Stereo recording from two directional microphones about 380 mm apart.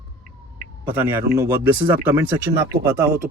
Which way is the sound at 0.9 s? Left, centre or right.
Centre.